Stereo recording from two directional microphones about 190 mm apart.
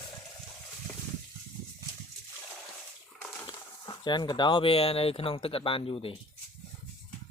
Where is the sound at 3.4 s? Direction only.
25° left (ahead or behind).